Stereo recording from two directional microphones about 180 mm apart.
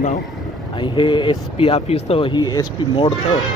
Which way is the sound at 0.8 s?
25° left (ahead or behind).